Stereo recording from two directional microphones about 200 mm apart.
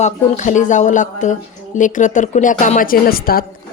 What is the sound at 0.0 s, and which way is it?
Speech, 40° left (ahead or behind).